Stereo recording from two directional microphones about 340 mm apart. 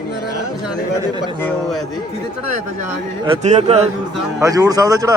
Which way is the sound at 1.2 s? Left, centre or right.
Centre.